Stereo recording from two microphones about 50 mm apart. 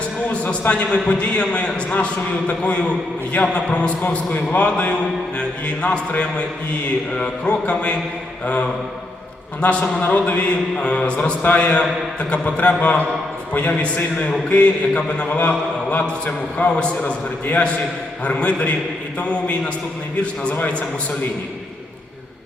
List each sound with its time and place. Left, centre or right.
0.7 s a man's voice: left
9.6 s a man's voice: left